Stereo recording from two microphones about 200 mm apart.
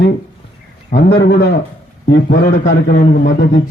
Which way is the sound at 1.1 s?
50° left (ahead or behind).